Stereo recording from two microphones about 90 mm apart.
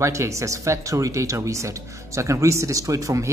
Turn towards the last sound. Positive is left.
turn(degrees=-35)  # may be behind; listen again after turning